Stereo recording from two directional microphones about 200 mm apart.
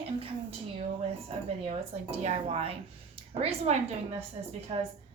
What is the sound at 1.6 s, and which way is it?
A woman's voice, 35° right (ahead or behind).